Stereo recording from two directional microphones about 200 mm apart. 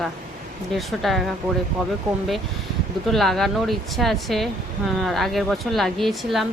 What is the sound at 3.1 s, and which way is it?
Speech, centre (ahead or behind).